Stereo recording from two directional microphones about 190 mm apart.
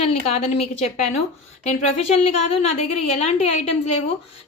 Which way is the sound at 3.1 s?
35° left (ahead or behind).